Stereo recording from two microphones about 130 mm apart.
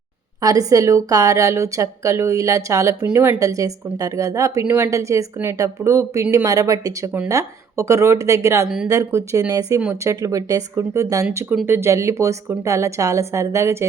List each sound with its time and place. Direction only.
0.4 s a woman's voice: 25° right (ahead or behind)
8.6 s speech: 5° right (ahead or behind)
8.9 s a woman's voice: 25° right (ahead or behind)